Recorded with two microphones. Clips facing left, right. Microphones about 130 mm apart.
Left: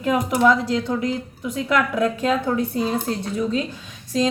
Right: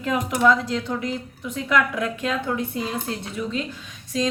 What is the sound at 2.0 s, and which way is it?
A woman's voice, 35° left (ahead or behind).